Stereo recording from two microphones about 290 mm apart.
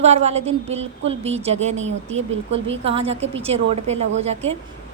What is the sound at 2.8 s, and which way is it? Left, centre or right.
A woman's voice, centre.